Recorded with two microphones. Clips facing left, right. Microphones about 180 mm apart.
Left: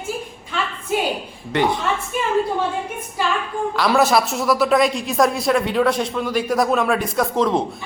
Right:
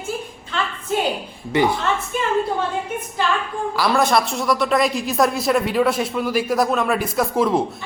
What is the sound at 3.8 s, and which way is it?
Speech, 5° left (ahead or behind).